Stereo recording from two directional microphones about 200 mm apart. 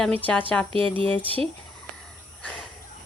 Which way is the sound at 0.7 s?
25° right (ahead or behind).